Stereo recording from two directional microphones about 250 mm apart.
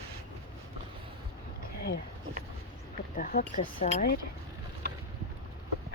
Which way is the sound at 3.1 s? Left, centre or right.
Left.